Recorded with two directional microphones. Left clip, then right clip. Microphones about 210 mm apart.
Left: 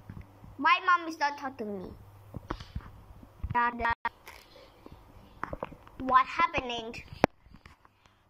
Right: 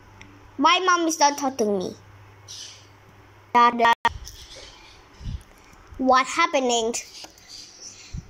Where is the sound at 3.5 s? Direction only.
25° right (ahead or behind).